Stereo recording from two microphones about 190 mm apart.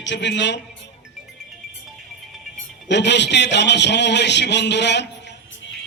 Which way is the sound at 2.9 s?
65° left (ahead or behind).